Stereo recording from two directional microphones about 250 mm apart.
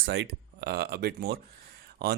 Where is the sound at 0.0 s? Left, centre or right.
Right.